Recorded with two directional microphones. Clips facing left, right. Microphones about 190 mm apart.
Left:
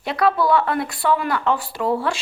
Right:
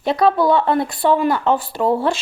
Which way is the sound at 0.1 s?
25° right (ahead or behind).